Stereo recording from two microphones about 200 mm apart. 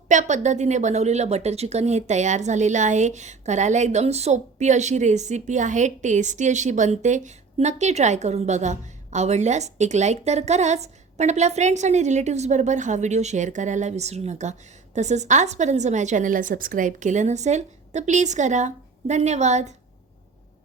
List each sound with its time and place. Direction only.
0.1 s a woman's voice: 35° right (ahead or behind)